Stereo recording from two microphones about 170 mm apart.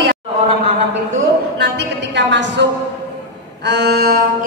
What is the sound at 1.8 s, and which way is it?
Speech, 90° right.